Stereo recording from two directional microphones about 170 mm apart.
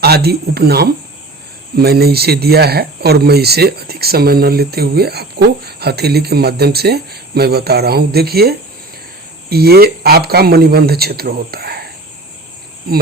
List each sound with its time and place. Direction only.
0.0 s speech: 70° right (ahead or behind)